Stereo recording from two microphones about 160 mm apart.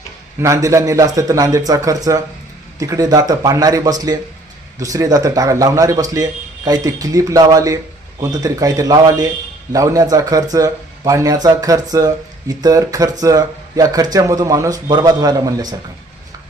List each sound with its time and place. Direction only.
0.4 s speech: 20° right (ahead or behind)